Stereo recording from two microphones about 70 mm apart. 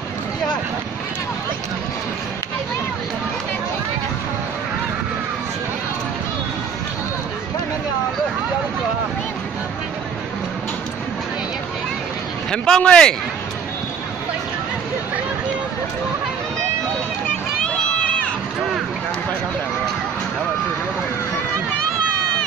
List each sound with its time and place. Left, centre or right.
12.4 s speech: centre
17.6 s crowd: centre